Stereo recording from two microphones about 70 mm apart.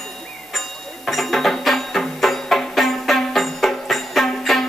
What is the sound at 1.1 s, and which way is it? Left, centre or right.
Music, centre.